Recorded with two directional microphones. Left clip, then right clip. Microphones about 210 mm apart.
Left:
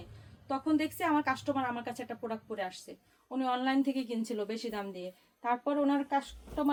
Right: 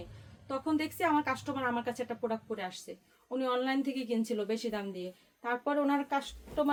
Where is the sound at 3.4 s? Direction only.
15° right (ahead or behind).